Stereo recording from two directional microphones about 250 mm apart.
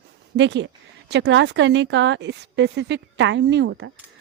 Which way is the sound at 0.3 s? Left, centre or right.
Right.